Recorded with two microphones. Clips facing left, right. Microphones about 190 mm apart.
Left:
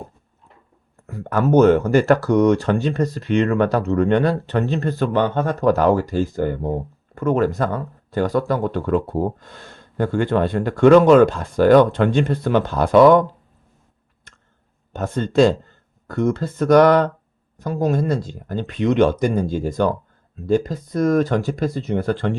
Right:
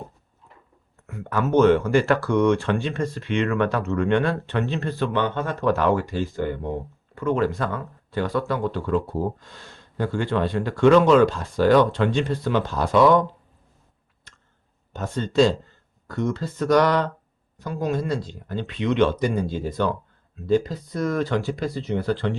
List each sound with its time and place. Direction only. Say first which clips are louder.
1.0 s a sound: left 4 dB; 35° left (ahead or behind)
1.3 s speech: left 4 dB; 40° left (ahead or behind)
14.9 s speech: left 3 dB; 50° left (ahead or behind)